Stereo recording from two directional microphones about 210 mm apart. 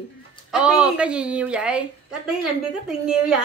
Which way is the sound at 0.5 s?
5° right (ahead or behind).